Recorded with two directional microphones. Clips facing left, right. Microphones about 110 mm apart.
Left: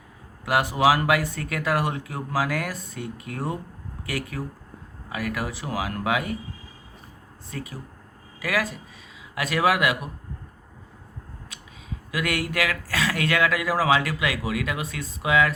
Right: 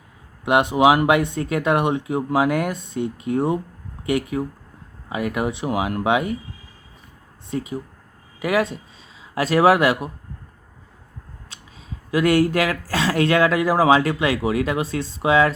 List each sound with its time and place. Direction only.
0.4 s speech: 20° right (ahead or behind)
7.5 s speech: 20° right (ahead or behind)
12.1 s speech: 30° right (ahead or behind)